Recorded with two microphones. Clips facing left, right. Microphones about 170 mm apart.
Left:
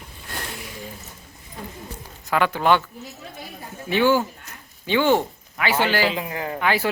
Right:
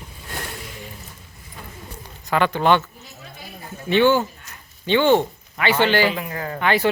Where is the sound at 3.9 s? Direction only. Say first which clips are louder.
Right 2 dB; 5° left (ahead or behind).